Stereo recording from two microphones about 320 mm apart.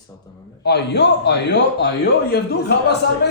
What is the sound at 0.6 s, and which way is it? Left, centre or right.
A man's voice, left.